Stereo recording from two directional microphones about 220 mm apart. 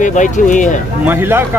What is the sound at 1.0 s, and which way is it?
Speech, 10° right (ahead or behind).